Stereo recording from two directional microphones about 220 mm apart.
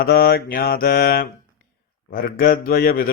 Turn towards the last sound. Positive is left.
turn(degrees=40)  # may be behind; listen again after turning